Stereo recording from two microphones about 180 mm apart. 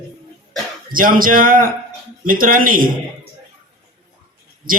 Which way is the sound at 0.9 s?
50° right (ahead or behind).